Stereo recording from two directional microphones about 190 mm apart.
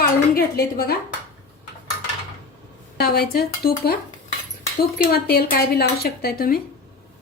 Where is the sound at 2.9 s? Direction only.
55° left (ahead or behind).